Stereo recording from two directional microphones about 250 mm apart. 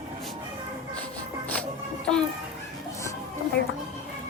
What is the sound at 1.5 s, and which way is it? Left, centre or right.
Music, centre.